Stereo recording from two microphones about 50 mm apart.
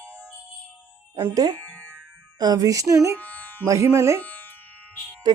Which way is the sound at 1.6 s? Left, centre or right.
Left.